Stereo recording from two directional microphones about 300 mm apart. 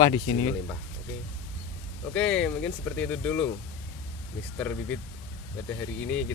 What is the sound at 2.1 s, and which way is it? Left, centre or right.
Speech, centre.